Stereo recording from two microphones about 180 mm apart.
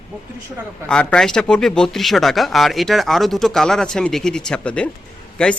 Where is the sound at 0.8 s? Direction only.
5° left (ahead or behind).